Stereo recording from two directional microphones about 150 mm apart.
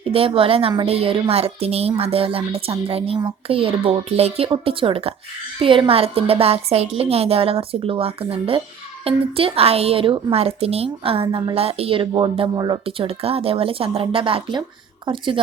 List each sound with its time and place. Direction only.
0.1 s a woman's voice: 40° right (ahead or behind)